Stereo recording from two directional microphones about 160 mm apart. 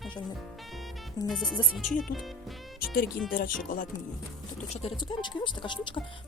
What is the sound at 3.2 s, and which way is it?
Speech, 60° left (ahead or behind).